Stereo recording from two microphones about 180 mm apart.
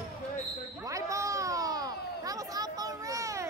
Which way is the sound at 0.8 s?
15° right (ahead or behind).